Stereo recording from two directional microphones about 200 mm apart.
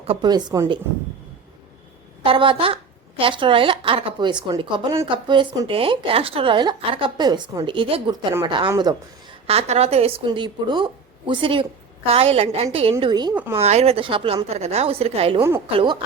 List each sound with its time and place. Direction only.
0.0 s a woman's voice: 25° right (ahead or behind)
2.2 s a woman's voice: 25° right (ahead or behind)
9.5 s a woman's voice: 30° right (ahead or behind)
13.6 s speech: 30° right (ahead or behind)
15.4 s a woman's voice: 10° right (ahead or behind)